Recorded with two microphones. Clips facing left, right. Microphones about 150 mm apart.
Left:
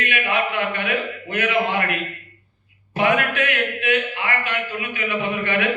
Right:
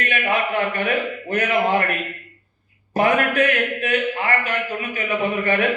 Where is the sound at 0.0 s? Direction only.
40° right (ahead or behind).